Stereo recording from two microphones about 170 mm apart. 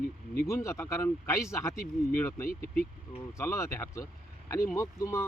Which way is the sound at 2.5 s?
55° left (ahead or behind).